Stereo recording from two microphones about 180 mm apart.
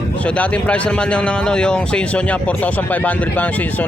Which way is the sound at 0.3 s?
5° left (ahead or behind).